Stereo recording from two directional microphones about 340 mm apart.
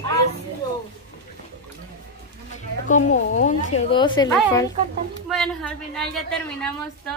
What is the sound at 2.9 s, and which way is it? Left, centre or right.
A woman's voice, left.